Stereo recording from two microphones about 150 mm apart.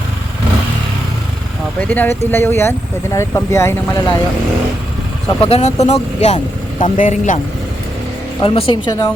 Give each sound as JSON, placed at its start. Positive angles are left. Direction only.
{"t": 1.8, "sound": "speech", "side_deg": 10}
{"t": 5.4, "sound": "speech", "side_deg": 45}
{"t": 8.4, "sound": "a woman's voice", "side_deg": 35}